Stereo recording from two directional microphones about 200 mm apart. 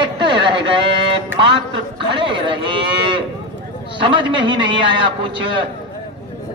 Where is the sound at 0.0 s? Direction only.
25° right (ahead or behind).